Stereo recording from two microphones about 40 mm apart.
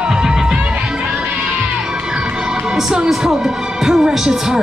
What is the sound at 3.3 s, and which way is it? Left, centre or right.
Speech, centre.